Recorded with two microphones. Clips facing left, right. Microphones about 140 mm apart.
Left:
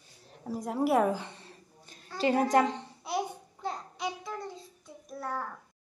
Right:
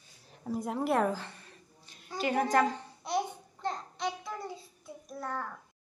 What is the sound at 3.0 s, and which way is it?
Babbling, 5° left (ahead or behind).